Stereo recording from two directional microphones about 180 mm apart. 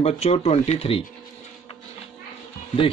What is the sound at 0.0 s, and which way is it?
Speech, 35° left (ahead or behind).